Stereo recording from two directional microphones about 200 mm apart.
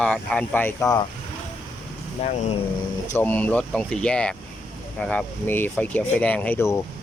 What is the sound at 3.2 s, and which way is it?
Speech, 10° left (ahead or behind).